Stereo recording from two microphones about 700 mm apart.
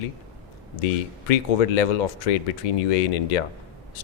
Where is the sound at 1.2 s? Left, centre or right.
Left.